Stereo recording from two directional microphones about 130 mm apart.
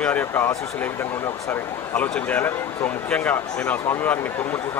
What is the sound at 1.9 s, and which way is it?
Speech, 10° left (ahead or behind).